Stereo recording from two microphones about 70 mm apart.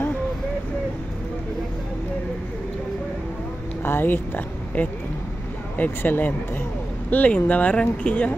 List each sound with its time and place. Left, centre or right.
3.8 s a woman's voice: left